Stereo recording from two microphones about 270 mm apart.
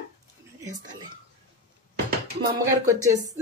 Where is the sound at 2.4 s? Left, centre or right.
Centre.